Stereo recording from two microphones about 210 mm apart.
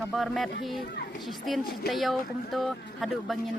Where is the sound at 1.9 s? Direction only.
Centre (ahead or behind).